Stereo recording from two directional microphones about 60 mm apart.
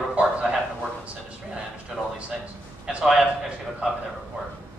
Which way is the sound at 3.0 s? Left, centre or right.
Centre.